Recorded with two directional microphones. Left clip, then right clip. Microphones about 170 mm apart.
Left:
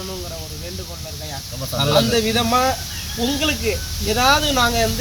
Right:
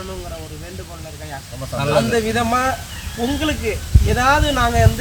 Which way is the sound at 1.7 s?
5° right (ahead or behind).